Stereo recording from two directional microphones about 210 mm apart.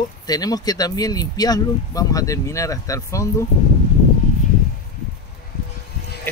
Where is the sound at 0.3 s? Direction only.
20° left (ahead or behind).